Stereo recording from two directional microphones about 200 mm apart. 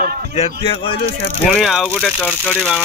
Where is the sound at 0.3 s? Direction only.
30° left (ahead or behind).